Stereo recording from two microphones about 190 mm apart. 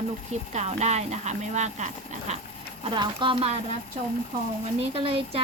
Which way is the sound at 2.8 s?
25° right (ahead or behind).